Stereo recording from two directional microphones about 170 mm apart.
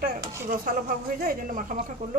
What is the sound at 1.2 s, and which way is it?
Speech, 55° right (ahead or behind).